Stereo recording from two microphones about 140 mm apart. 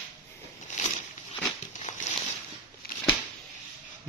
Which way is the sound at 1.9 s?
70° left (ahead or behind).